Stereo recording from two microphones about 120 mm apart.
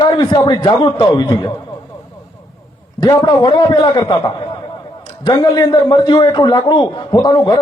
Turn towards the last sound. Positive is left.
turn(degrees=35)  # may be behind; listen again after turning